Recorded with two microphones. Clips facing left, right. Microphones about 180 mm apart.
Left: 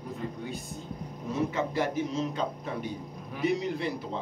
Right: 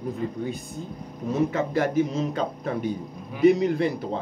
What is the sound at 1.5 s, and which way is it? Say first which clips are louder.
Speech: right 5 dB; 50° right (ahead or behind).